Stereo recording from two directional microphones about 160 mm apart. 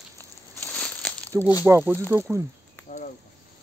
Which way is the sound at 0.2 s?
10° left (ahead or behind).